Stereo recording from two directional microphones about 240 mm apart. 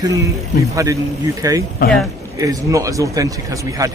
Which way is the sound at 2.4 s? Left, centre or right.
Centre.